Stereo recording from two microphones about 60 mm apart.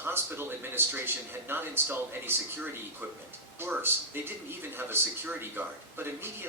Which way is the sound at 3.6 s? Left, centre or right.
Right.